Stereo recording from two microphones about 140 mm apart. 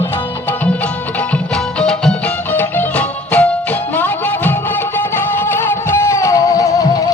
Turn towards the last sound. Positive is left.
turn(degrees=25)  # may be behind; listen again after turning